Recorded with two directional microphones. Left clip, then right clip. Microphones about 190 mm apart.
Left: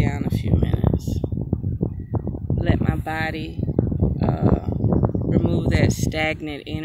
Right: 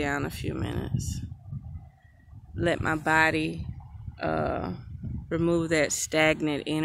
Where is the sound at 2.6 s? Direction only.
10° right (ahead or behind).